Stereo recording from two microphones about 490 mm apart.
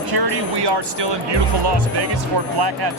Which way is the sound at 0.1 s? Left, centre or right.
Right.